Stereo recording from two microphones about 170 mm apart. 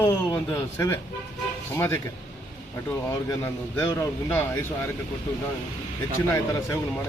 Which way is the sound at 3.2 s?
15° left (ahead or behind).